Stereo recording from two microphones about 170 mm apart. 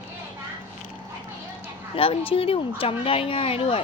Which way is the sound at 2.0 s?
35° left (ahead or behind).